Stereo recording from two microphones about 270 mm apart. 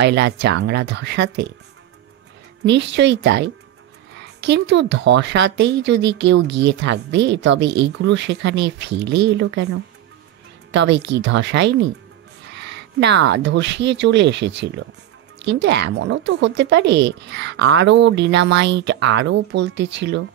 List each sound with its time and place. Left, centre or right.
0.0 s speech: right
2.6 s speech: right